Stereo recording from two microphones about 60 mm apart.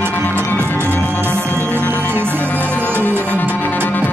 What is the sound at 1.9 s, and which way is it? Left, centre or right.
Music, right.